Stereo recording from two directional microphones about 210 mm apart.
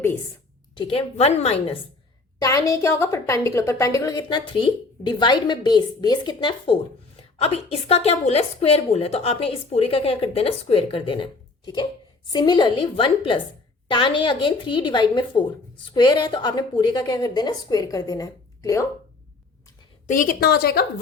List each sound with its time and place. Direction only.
0.8 s a woman's voice: 25° left (ahead or behind)
2.4 s a woman's voice: 15° left (ahead or behind)
20.1 s a woman's voice: 40° left (ahead or behind)